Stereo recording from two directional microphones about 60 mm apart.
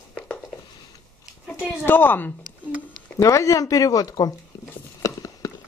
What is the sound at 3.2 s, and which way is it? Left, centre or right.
Speech, left.